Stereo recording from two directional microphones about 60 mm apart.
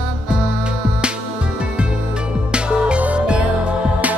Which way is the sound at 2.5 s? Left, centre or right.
Centre.